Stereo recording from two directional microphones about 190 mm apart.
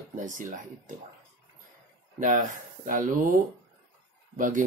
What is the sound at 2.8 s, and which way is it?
Speech, 45° right (ahead or behind).